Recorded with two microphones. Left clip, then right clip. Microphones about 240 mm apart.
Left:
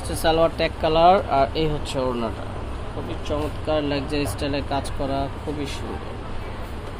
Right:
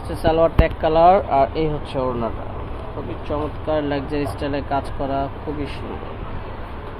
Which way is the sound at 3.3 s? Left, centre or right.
Centre.